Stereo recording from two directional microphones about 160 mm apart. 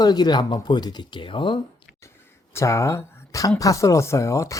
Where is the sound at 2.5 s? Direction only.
20° left (ahead or behind).